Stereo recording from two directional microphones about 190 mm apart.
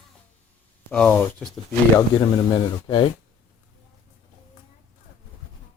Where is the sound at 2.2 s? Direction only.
30° left (ahead or behind).